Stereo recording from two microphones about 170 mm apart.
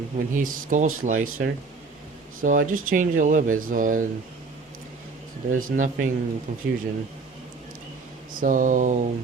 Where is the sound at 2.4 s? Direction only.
55° right (ahead or behind).